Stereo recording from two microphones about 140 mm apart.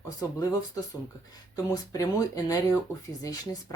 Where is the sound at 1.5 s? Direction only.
25° left (ahead or behind).